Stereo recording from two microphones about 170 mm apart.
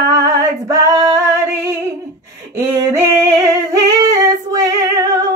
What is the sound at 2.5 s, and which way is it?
Female singing, 15° right (ahead or behind).